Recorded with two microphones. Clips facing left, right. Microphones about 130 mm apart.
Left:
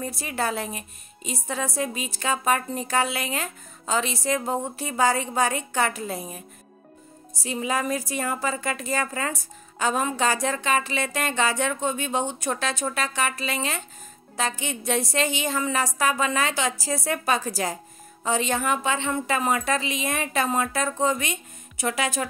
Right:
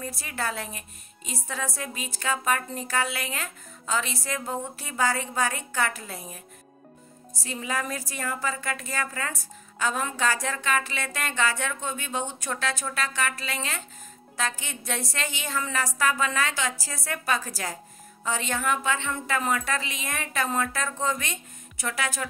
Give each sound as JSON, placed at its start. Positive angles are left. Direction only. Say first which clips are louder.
{"t": 0.0, "sound": "a woman's voice", "louder": "left 4 dB", "side_deg": 20}
{"t": 7.4, "sound": "a woman's voice", "louder": "left 5 dB", "side_deg": 20}